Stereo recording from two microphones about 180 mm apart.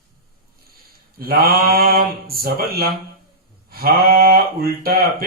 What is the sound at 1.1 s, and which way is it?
Speech, 55° right (ahead or behind).